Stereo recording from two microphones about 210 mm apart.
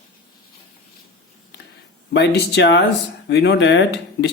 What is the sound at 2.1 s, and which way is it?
Speech, 55° left (ahead or behind).